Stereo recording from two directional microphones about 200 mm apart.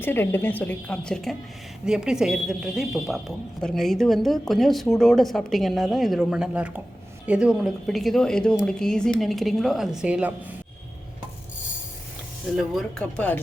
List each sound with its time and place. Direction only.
0.0 s a woman's voice: 10° left (ahead or behind); by 10.5 s 5° right (ahead or behind)
12.5 s speech: centre (ahead or behind)